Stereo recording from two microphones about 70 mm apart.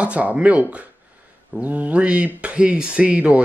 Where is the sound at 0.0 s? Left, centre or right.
Right.